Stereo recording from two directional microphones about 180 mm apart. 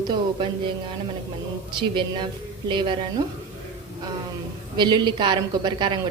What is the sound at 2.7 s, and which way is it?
Speech, 25° right (ahead or behind).